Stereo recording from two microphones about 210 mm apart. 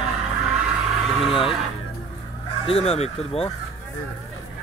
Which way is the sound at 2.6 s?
30° left (ahead or behind).